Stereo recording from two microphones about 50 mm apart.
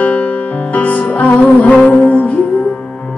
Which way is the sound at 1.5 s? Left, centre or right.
Centre.